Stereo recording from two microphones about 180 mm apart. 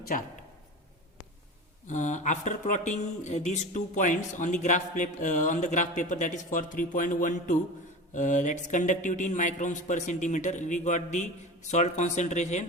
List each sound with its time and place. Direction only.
0.1 s speech: 50° left (ahead or behind)
1.9 s speech: 40° left (ahead or behind)